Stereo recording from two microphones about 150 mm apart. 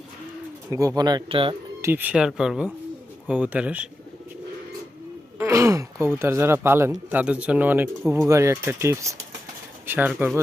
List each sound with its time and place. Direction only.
0.7 s speech: 25° right (ahead or behind)
1.8 s speech: 15° right (ahead or behind)
5.4 s speech: 20° right (ahead or behind)
10.1 s speech: 5° right (ahead or behind)